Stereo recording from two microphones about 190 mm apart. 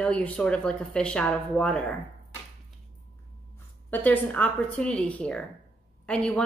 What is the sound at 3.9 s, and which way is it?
A woman's voice, 10° left (ahead or behind).